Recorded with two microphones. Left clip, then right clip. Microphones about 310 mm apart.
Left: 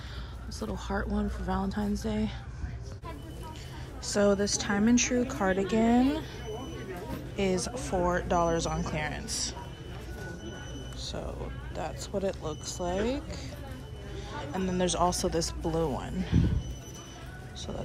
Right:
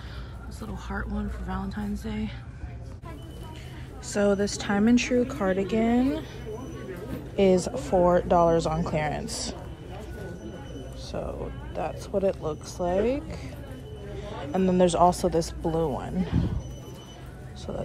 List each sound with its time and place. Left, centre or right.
0.6 s speech: centre
4.0 s a woman's voice: centre
7.3 s a woman's voice: centre
11.1 s a woman's voice: centre
15.6 s speech: centre
16.0 s a woman's voice: centre